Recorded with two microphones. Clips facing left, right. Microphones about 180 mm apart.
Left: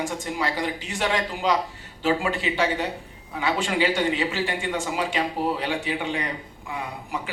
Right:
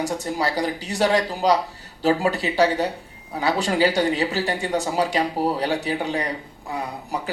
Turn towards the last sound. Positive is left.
turn(degrees=-40)  # may be behind; listen again after turning